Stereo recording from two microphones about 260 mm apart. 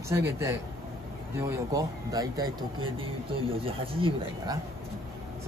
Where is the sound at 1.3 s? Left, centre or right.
Centre.